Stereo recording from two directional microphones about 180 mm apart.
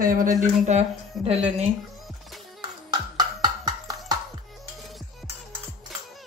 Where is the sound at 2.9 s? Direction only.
25° right (ahead or behind).